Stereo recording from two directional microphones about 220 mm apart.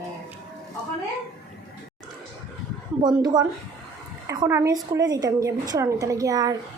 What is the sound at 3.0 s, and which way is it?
A woman's voice, 20° right (ahead or behind).